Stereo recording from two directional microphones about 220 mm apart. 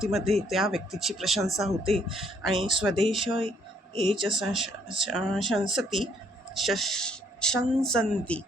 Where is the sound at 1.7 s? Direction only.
25° right (ahead or behind).